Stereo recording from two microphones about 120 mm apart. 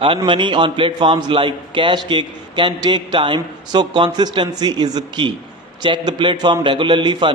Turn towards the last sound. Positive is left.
turn(degrees=-40)  # may be behind; listen again after turning